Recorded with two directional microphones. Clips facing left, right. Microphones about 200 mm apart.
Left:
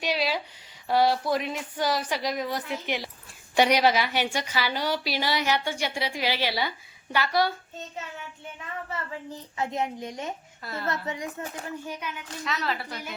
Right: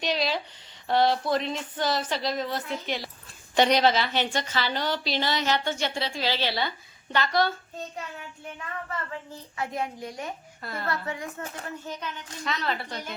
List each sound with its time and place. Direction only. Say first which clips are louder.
0.0 s a sound: even; 10° left (ahead or behind)
0.9 s a woman's voice: even; 10° left (ahead or behind)
9.3 s a child's voice: left 3 dB; 20° left (ahead or behind)
10.6 s speech: right 2 dB; 5° left (ahead or behind)
10.8 s a child's voice: left 1 dB; 20° left (ahead or behind)